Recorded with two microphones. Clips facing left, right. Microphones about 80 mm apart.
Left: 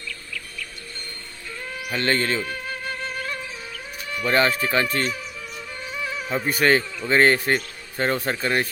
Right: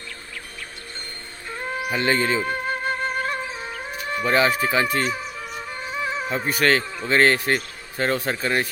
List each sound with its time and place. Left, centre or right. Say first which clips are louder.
1.5 s music: right 6 dB; right
1.9 s speech: right 1 dB; centre
2.4 s music: right 5 dB; right
4.0 s chicken: right 3 dB; right
4.3 s speech: right 1 dB; centre
5.1 s music: right 4 dB; right
6.4 s a man's voice: left 1 dB; centre